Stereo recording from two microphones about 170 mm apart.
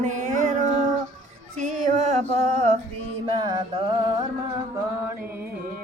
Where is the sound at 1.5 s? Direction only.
45° right (ahead or behind).